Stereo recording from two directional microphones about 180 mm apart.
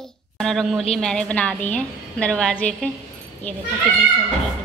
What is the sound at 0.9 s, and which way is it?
A woman's voice, 5° left (ahead or behind).